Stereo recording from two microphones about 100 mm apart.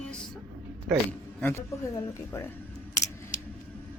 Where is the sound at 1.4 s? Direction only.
20° left (ahead or behind).